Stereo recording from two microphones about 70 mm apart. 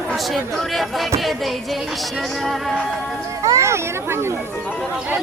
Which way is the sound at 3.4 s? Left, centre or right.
Right.